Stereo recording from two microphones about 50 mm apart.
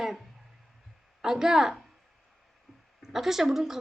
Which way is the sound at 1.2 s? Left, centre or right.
Centre.